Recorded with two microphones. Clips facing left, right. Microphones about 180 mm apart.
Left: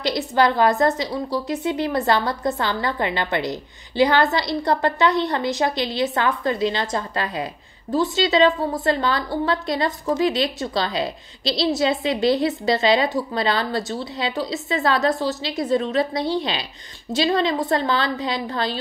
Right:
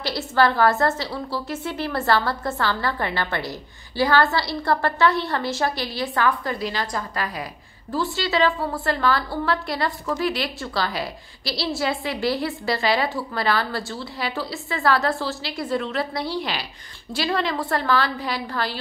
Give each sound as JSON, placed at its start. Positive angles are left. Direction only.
{"t": 0.0, "sound": "a woman's voice", "side_deg": 20}